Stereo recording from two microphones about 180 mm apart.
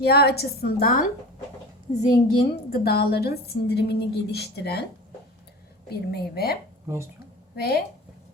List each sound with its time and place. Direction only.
0.0 s a woman's voice: 60° left (ahead or behind)
2.2 s a woman's voice: 55° left (ahead or behind)
5.9 s a woman's voice: 60° left (ahead or behind)
6.8 s speech: 15° right (ahead or behind)
7.5 s a woman's voice: 60° left (ahead or behind)